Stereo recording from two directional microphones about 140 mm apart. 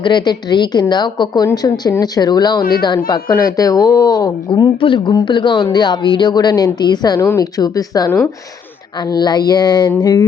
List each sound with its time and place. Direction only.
0.0 s a woman's voice: 35° left (ahead or behind)